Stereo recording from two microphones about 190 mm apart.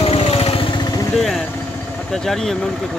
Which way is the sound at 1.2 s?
Centre (ahead or behind).